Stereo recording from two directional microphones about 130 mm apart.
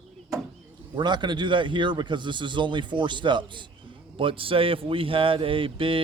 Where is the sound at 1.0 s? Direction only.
35° right (ahead or behind).